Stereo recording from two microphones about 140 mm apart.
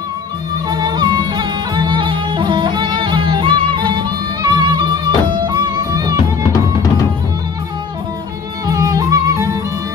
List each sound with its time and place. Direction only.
0.7 s music: 30° right (ahead or behind)
8.6 s music: 25° right (ahead or behind)